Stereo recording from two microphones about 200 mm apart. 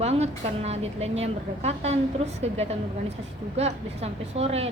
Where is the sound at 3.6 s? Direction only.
30° right (ahead or behind).